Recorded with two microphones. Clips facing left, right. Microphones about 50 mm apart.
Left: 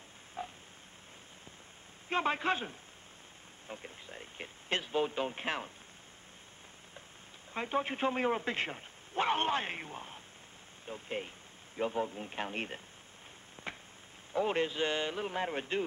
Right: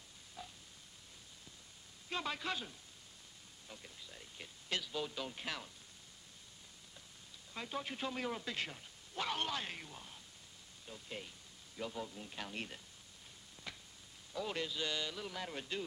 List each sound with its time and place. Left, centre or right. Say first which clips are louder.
0.4 s frog: left 10 dB; left
2.0 s speech: left 9 dB; left
7.5 s speech: left 9 dB; left
13.7 s a sound: left 7 dB; left
14.3 s speech: left 9 dB; left